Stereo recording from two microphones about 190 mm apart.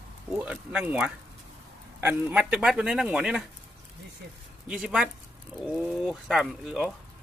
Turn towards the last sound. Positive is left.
turn(degrees=-5)  # may be behind; listen again after turning